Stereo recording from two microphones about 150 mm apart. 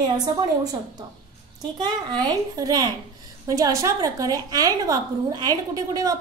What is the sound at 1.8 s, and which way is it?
A woman's voice, 30° right (ahead or behind).